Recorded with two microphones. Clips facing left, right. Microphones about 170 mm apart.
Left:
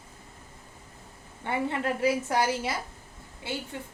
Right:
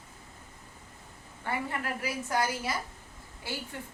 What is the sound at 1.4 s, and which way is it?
A woman's voice, 25° left (ahead or behind).